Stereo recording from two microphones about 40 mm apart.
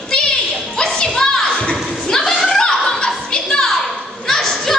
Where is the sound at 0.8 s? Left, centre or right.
Centre.